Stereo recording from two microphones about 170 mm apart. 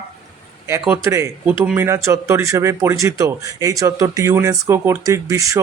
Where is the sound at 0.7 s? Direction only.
15° right (ahead or behind).